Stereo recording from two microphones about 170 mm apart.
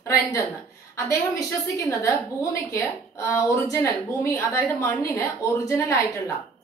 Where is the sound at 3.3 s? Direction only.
20° left (ahead or behind).